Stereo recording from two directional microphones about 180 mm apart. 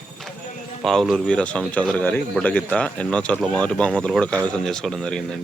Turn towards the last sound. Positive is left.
turn(degrees=5)  # may be behind; listen again after turning